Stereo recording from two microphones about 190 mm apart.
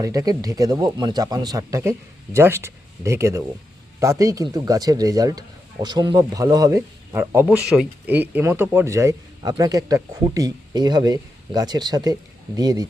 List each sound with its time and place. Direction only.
0.0 s speech: 20° right (ahead or behind)